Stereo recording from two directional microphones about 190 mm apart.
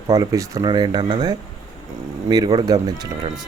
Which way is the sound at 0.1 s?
15° right (ahead or behind).